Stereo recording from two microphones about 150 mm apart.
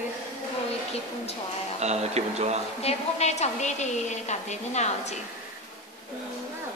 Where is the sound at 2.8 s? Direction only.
45° left (ahead or behind).